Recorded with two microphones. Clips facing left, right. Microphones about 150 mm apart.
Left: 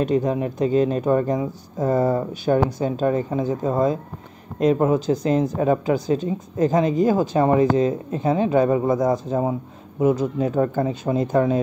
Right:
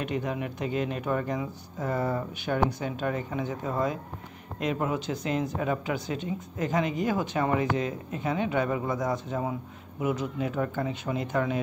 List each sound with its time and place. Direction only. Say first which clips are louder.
0.0 s speech: left 10 dB; 35° left (ahead or behind)